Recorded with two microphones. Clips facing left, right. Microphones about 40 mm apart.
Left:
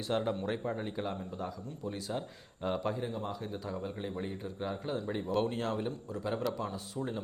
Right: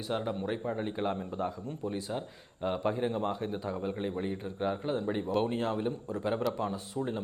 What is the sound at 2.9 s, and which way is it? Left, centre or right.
A man's voice, right.